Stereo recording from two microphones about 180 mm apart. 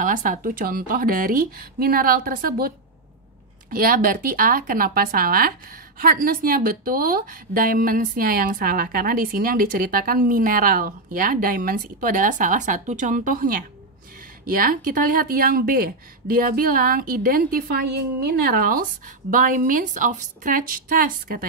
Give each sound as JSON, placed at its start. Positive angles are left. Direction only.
{"t": 0.0, "sound": "a woman's voice", "side_deg": -50}
{"t": 3.7, "sound": "a woman's voice", "side_deg": -55}